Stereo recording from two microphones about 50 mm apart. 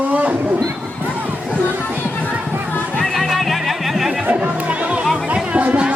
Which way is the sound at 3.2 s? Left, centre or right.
Centre.